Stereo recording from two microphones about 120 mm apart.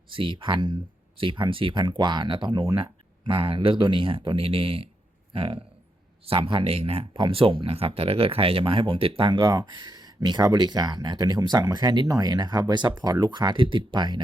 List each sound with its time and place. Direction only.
0.1 s speech: 45° right (ahead or behind)